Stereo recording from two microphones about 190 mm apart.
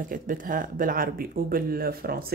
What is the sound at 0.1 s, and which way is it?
Speech, 45° right (ahead or behind).